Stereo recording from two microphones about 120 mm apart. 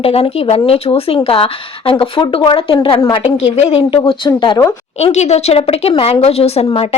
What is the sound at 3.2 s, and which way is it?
Speech, 65° left (ahead or behind).